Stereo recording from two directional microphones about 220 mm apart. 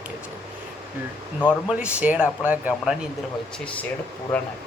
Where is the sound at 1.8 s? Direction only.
5° right (ahead or behind).